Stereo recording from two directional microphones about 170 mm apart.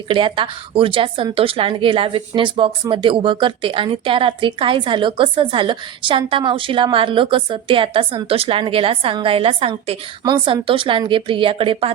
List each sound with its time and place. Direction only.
0.1 s a woman's voice: 30° right (ahead or behind)